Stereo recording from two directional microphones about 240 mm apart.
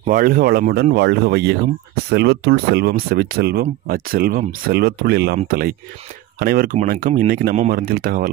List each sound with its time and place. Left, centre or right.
0.0 s speech: right